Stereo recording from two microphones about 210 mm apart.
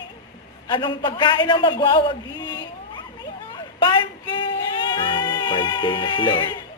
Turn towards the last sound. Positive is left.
turn(degrees=20)  # may be behind; listen again after turning